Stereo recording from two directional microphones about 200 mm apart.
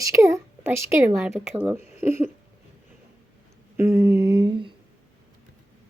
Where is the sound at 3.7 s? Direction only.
15° right (ahead or behind).